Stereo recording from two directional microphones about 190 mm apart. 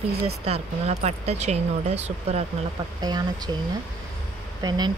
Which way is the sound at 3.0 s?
20° right (ahead or behind).